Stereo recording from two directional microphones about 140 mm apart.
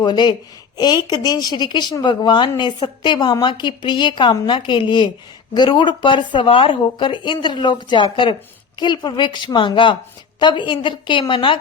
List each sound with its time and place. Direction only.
0.0 s speech: 30° left (ahead or behind)